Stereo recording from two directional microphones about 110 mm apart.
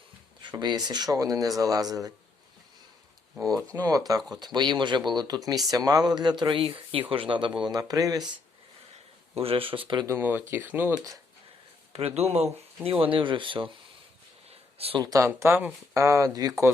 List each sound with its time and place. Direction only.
0.5 s speech: 40° right (ahead or behind)
3.5 s speech: 30° right (ahead or behind)
7.6 s speech: 35° right (ahead or behind)
9.3 s speech: 60° right (ahead or behind)
10.1 s speech: 20° right (ahead or behind)
10.9 s speech: 35° right (ahead or behind)
11.9 s speech: 70° right (ahead or behind)
12.9 s speech: 50° right (ahead or behind)
14.5 s a sound: 65° right (ahead or behind)
15.0 s speech: 30° right (ahead or behind)